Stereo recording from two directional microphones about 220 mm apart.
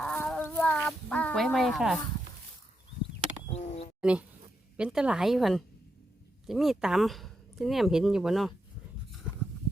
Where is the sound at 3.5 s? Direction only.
30° left (ahead or behind).